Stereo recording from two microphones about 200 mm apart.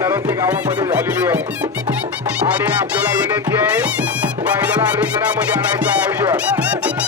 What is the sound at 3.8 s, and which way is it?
Music, 5° right (ahead or behind).